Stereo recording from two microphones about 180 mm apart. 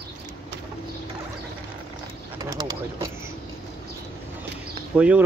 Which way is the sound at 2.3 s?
20° right (ahead or behind).